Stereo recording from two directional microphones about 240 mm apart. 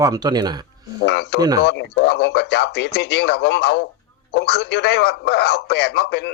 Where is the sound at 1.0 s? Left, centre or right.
Left.